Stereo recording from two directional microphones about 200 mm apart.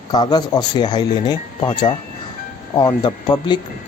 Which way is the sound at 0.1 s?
20° left (ahead or behind).